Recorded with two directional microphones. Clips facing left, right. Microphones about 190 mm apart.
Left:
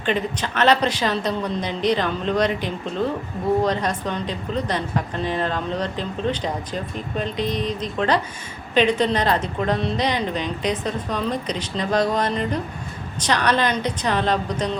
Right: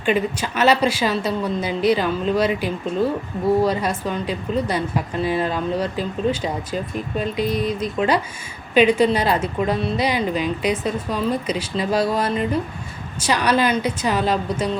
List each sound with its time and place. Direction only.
0.0 s a woman's voice: 10° right (ahead or behind)